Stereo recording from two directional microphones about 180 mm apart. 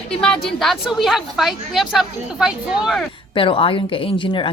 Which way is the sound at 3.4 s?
30° left (ahead or behind).